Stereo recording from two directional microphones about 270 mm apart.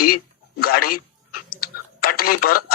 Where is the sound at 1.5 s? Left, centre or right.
Left.